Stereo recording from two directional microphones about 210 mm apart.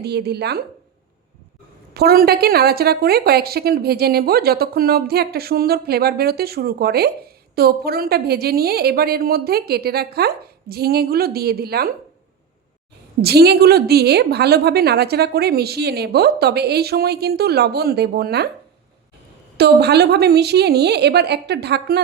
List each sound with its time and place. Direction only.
0.0 s a woman's voice: 50° right (ahead or behind)
1.9 s a woman's voice: 45° right (ahead or behind)
13.2 s a woman's voice: 50° right (ahead or behind)
19.5 s a woman's voice: 50° right (ahead or behind)